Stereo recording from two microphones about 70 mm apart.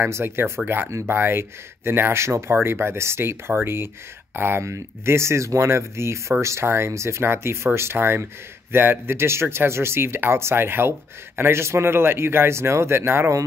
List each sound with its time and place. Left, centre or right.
0.0 s speech: right